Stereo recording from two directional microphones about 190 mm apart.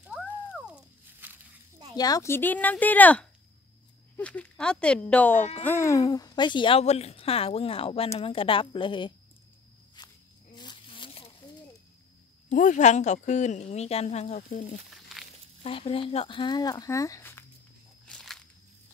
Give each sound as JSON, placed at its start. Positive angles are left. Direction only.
{"t": 1.2, "sound": "a sound", "side_deg": -10}
{"t": 2.0, "sound": "speech", "side_deg": 20}
{"t": 10.0, "sound": "walk", "side_deg": 20}
{"t": 10.5, "sound": "zipper", "side_deg": 25}
{"t": 12.4, "sound": "speech", "side_deg": 40}
{"t": 15.1, "sound": "a sound", "side_deg": 0}
{"t": 15.6, "sound": "speech", "side_deg": 30}
{"t": 18.0, "sound": "walk", "side_deg": 0}